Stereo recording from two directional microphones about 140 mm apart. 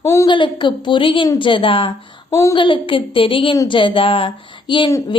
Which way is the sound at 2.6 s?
35° left (ahead or behind).